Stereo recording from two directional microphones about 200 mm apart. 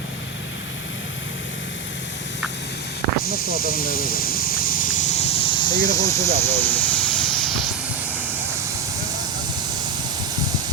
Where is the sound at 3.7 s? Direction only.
45° left (ahead or behind); by 5.6 s 25° left (ahead or behind).